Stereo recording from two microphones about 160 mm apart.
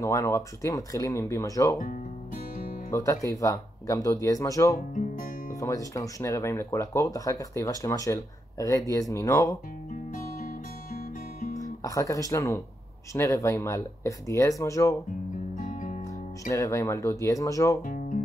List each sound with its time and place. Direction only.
0.0 s speech: 20° left (ahead or behind)
1.8 s music: 55° left (ahead or behind)
2.9 s speech: 20° left (ahead or behind)
4.7 s speech: 60° left (ahead or behind)
5.6 s speech: 20° left (ahead or behind)
11.4 s guitar: 50° left (ahead or behind)
11.8 s speech: 20° left (ahead or behind)
15.5 s music: 60° left (ahead or behind)
16.4 s speech: 20° left (ahead or behind)
17.8 s music: 55° left (ahead or behind)